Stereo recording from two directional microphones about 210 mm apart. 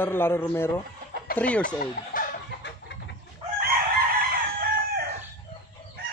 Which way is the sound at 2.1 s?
40° left (ahead or behind).